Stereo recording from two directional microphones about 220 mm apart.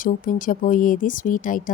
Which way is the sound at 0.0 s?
35° left (ahead or behind).